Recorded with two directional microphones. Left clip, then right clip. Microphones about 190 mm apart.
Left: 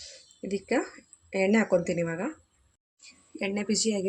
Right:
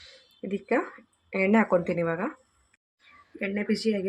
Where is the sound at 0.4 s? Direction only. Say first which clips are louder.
Right 1 dB; 15° left (ahead or behind).